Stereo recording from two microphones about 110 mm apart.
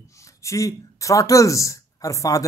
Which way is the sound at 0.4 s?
30° left (ahead or behind).